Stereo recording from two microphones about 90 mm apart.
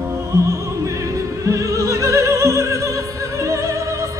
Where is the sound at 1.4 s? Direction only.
35° right (ahead or behind).